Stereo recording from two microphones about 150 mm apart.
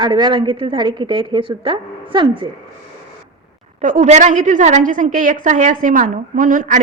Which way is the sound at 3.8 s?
55° right (ahead or behind).